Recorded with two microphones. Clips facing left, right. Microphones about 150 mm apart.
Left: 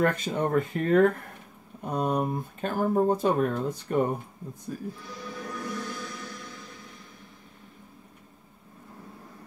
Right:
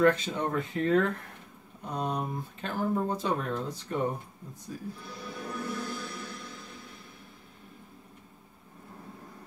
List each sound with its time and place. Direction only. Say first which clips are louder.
0.0 s speech: right 1 dB; 50° left (ahead or behind)
5.2 s music: left 1 dB; 5° right (ahead or behind)